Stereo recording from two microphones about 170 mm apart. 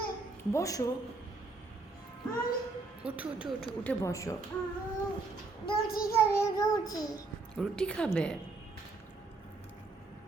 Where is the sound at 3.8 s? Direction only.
20° left (ahead or behind).